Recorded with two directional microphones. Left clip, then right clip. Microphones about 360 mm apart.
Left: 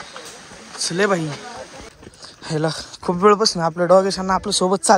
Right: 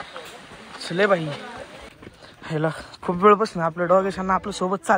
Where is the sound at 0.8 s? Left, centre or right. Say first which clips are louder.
Left 1 dB; centre.